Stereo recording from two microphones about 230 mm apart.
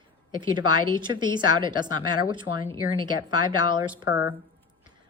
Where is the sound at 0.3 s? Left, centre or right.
Centre.